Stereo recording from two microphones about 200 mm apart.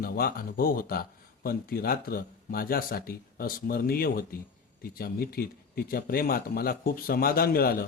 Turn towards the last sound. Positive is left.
turn(degrees=50)  # may be behind; listen again after turning